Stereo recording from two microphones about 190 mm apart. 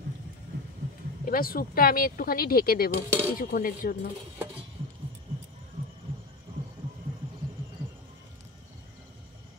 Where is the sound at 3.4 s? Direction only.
50° left (ahead or behind).